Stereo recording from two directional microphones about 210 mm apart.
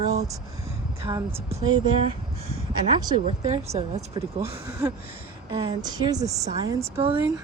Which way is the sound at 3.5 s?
30° right (ahead or behind).